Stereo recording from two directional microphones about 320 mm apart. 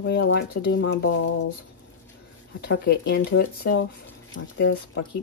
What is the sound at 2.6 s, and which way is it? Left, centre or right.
Speech, left.